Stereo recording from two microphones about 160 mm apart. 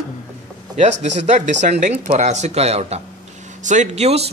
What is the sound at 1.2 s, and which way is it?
Speech, 50° right (ahead or behind).